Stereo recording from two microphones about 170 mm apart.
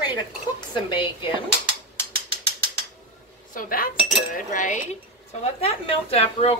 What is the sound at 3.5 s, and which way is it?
Speech, 55° left (ahead or behind).